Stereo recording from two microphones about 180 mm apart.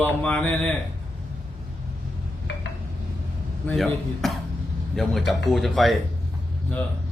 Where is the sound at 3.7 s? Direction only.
Centre (ahead or behind).